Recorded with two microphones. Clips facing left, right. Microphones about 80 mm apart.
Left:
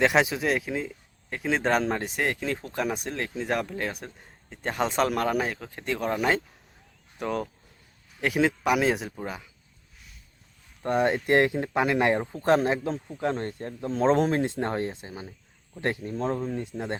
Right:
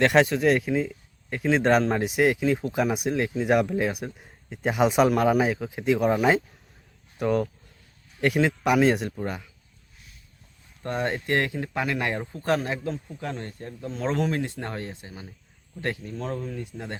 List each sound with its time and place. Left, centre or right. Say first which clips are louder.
0.0 s speech: right 3 dB; centre
10.8 s speech: left 4 dB; centre